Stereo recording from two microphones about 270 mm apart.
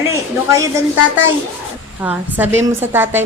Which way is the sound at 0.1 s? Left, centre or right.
Centre.